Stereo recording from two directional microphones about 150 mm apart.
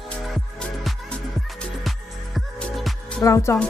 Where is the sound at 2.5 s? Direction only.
Centre (ahead or behind).